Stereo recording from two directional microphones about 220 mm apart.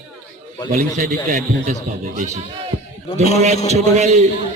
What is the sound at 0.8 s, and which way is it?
A man's voice, 35° right (ahead or behind).